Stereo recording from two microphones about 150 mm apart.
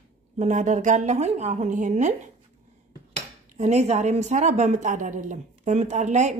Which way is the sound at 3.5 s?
50° right (ahead or behind).